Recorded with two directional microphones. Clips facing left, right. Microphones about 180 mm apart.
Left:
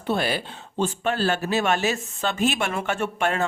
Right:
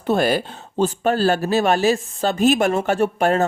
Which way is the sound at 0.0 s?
45° right (ahead or behind).